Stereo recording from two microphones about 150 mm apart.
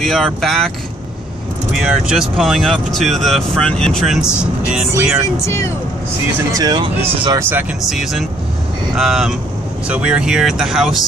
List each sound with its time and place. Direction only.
0.0 s speech: centre (ahead or behind)
1.7 s speech: 5° right (ahead or behind)
6.5 s speech: 25° right (ahead or behind)
7.2 s speech: 15° right (ahead or behind)
7.9 s speech: centre (ahead or behind)